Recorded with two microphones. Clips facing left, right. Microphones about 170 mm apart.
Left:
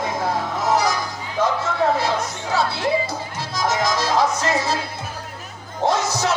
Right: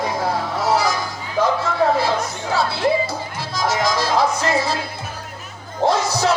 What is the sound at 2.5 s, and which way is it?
Music, 20° left (ahead or behind).